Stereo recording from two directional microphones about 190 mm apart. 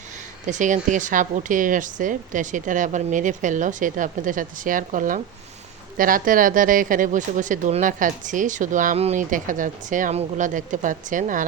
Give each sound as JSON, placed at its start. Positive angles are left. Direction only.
{"t": 0.4, "sound": "speech", "side_deg": -40}